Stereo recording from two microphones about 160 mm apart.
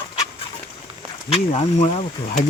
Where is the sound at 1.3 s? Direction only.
35° left (ahead or behind).